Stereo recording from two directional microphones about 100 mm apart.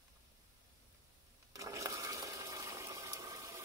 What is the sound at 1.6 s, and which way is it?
Water, 30° right (ahead or behind).